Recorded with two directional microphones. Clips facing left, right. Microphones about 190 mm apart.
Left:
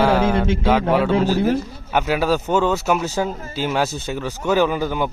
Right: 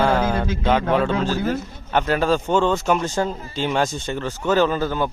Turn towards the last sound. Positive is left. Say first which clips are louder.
# even
turn(degrees=15)  # may be behind; listen again after turning